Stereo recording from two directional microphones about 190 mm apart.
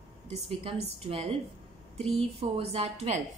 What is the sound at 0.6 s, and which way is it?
A woman's voice, 30° right (ahead or behind).